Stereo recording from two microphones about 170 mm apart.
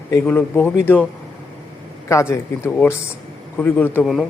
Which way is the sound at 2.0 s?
15° left (ahead or behind).